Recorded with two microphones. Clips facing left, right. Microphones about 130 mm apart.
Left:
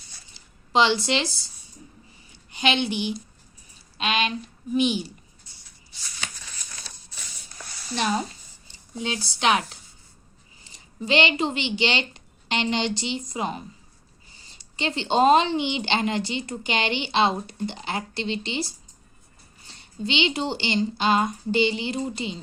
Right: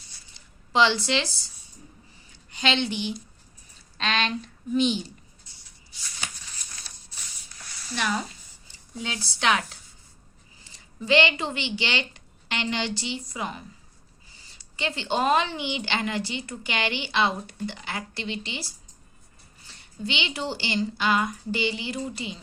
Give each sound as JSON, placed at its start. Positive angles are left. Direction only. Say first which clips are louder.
{"t": 0.7, "sound": "speech", "louder": "left 1 dB", "side_deg": 15}
{"t": 2.6, "sound": "a woman's voice", "louder": "left 2 dB", "side_deg": 15}
{"t": 7.9, "sound": "a woman's voice", "louder": "left 3 dB", "side_deg": 25}
{"t": 14.8, "sound": "a woman's voice", "louder": "left 5 dB", "side_deg": 25}